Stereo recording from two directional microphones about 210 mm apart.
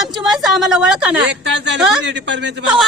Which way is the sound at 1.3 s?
55° right (ahead or behind).